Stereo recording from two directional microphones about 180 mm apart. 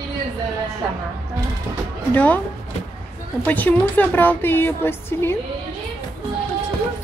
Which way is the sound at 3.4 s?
10° left (ahead or behind).